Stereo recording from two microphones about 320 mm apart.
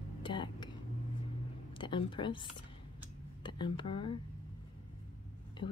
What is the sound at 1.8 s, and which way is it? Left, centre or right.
Speech, centre.